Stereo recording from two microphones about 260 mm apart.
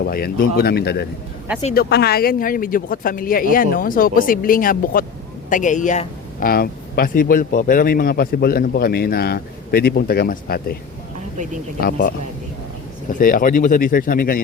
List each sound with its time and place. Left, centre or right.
0.0 s speech: left
11.8 s speech: left